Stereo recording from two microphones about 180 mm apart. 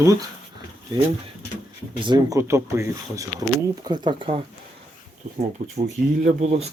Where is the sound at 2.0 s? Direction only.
20° right (ahead or behind).